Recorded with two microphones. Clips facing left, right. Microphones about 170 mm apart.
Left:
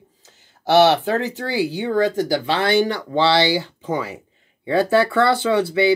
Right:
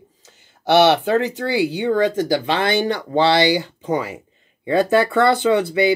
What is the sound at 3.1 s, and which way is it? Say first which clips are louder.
Speech: right 4 dB; 50° right (ahead or behind).